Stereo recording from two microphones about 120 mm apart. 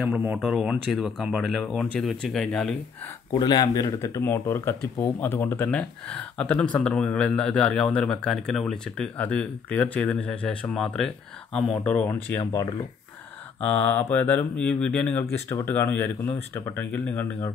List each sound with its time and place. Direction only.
0.4 s speech: 5° right (ahead or behind)
3.3 s speech: 35° left (ahead or behind); by 12.4 s 15° left (ahead or behind)
13.6 s speech: 10° left (ahead or behind)